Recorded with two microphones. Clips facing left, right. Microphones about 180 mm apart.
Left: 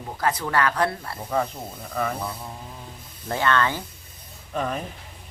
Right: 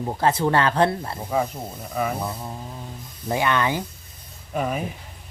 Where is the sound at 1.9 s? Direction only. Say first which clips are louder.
Right 2 dB; 10° right (ahead or behind).